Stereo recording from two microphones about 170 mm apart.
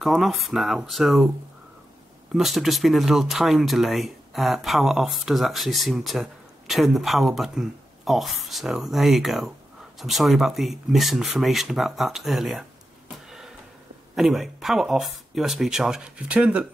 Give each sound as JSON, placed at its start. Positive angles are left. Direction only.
{"t": 0.0, "sound": "speech", "side_deg": 0}
{"t": 2.3, "sound": "speech", "side_deg": 0}
{"t": 13.3, "sound": "a sound", "side_deg": -5}
{"t": 14.1, "sound": "speech", "side_deg": 0}